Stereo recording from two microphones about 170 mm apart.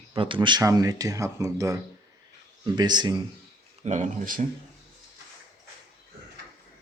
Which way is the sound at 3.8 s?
45° right (ahead or behind).